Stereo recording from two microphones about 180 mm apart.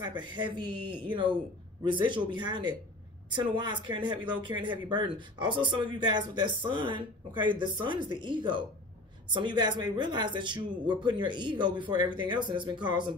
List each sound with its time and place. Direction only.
0.0 s speech: 25° right (ahead or behind)